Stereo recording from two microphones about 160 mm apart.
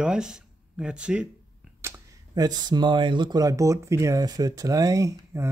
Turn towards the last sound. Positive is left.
turn(degrees=-20)  # may be behind; listen again after turning